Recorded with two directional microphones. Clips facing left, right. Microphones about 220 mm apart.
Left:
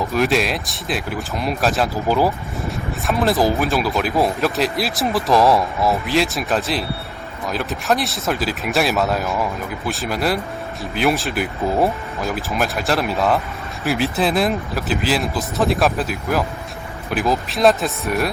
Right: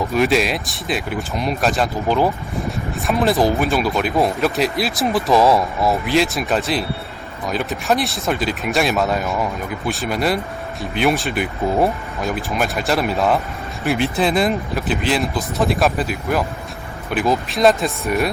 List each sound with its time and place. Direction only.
0.1 s speech: centre (ahead or behind)